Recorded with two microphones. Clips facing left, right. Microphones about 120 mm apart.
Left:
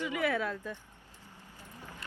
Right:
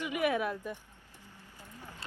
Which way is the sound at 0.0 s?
20° right (ahead or behind).